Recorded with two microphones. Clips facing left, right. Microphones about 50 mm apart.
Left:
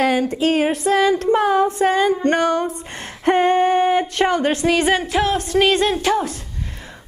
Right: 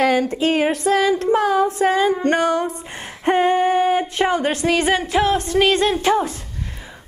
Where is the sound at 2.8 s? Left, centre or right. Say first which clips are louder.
Left 2 dB; centre.